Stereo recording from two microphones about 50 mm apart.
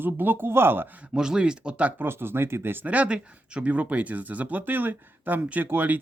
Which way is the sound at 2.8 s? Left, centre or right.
Right.